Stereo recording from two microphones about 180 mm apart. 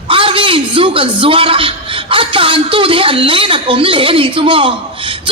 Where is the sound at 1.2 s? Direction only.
30° right (ahead or behind).